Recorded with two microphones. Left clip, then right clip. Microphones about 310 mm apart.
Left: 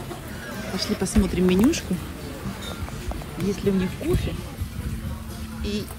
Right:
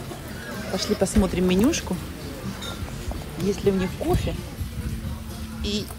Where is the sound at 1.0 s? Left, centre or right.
Centre.